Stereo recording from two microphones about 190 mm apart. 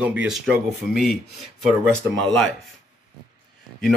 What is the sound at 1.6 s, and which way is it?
Speech, 5° left (ahead or behind).